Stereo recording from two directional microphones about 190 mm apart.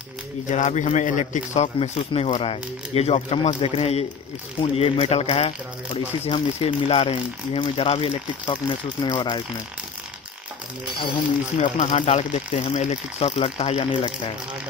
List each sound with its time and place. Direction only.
0.5 s speech: 40° left (ahead or behind); by 9.4 s 25° left (ahead or behind)
11.6 s speech: 40° left (ahead or behind)